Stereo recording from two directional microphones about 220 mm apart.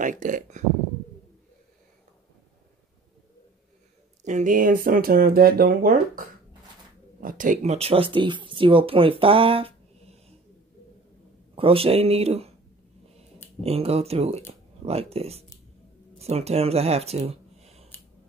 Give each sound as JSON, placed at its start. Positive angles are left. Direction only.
{"t": 0.0, "sound": "speech", "side_deg": -35}
{"t": 4.2, "sound": "speech", "side_deg": -35}
{"t": 11.5, "sound": "speech", "side_deg": -25}
{"t": 13.6, "sound": "speech", "side_deg": -25}